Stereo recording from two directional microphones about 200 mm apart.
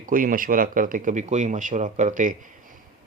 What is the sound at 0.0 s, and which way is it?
Speech, 45° right (ahead or behind).